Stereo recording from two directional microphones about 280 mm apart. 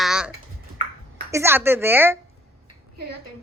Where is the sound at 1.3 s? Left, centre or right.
Centre.